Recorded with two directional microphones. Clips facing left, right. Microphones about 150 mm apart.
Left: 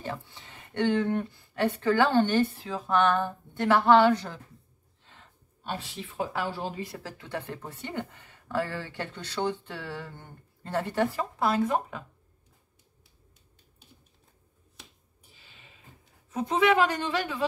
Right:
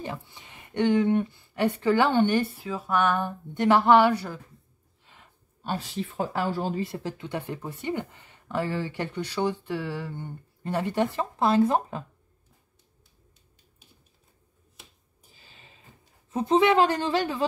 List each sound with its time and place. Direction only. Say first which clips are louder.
0.0 s speech: right 1 dB; 15° right (ahead or behind)
5.0 s a sound: even; 10° right (ahead or behind)
5.6 s speech: right 5 dB; 40° right (ahead or behind)
6.9 s speech: right 4 dB; 20° right (ahead or behind)
15.3 s a sound: right 2 dB; 35° right (ahead or behind)
16.3 s speech: right 3 dB; 30° right (ahead or behind)